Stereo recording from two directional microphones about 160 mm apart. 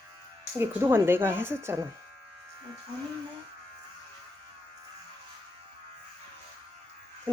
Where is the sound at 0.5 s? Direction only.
15° right (ahead or behind).